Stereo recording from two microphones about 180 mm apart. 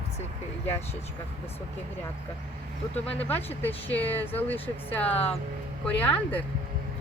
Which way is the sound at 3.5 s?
10° left (ahead or behind).